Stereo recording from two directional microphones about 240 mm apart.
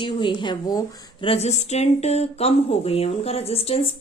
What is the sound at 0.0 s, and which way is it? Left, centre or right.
A woman's voice, centre.